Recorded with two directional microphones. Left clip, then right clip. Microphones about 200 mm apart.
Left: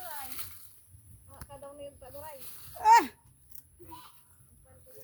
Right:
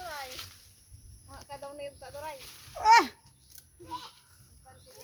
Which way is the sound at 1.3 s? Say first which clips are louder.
Right 5 dB; 10° right (ahead or behind).